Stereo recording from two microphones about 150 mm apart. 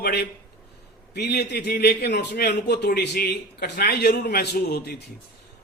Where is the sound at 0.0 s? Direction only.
90° left.